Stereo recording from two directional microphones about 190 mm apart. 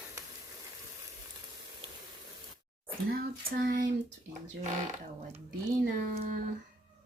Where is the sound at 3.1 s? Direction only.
50° right (ahead or behind).